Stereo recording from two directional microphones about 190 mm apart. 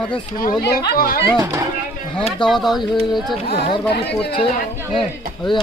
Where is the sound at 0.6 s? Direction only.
55° left (ahead or behind).